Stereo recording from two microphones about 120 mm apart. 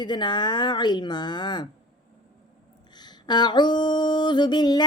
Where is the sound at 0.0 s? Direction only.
40° left (ahead or behind).